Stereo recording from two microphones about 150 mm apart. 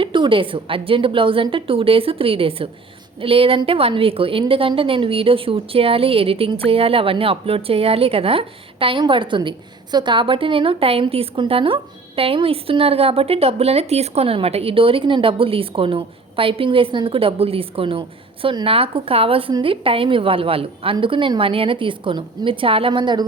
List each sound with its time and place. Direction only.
0.0 s a woman's voice: 35° right (ahead or behind)